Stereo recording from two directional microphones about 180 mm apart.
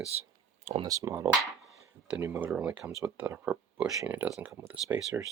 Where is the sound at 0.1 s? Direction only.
35° right (ahead or behind).